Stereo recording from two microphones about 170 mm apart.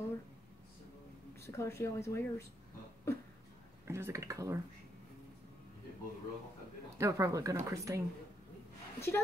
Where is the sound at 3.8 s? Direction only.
15° right (ahead or behind).